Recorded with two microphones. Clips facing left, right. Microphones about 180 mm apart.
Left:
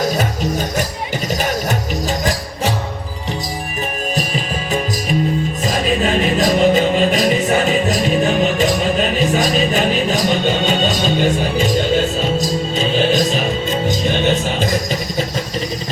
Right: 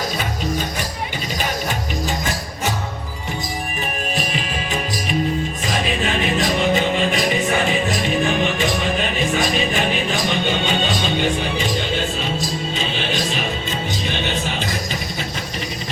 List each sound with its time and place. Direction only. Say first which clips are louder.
2.0 s music: left 4 dB; 35° left (ahead or behind)
5.6 s music: left 6 dB; 40° left (ahead or behind)